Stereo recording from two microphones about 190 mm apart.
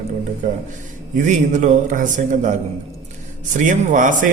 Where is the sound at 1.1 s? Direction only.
40° right (ahead or behind).